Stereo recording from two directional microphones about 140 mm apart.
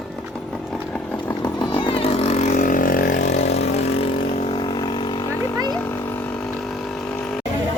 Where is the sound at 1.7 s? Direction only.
35° left (ahead or behind).